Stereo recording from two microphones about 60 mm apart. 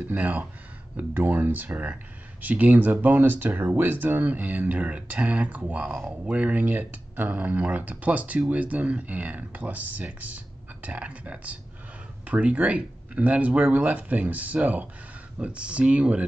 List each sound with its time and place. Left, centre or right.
0.1 s speech: right